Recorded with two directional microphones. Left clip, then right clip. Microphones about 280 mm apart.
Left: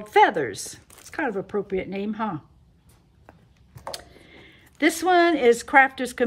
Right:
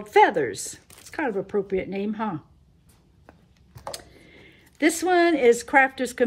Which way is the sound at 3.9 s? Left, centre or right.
Centre.